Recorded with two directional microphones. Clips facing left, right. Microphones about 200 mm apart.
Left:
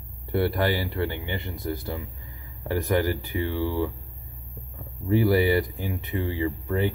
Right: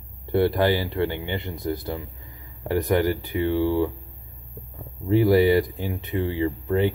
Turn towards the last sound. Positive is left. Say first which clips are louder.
# right 3 dB
turn(degrees=-20)  # may be behind; listen again after turning